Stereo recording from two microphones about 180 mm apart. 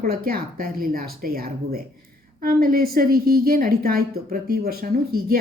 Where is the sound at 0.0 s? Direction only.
55° right (ahead or behind).